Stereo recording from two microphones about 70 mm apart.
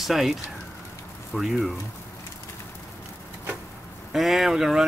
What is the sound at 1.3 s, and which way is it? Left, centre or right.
Speech, centre.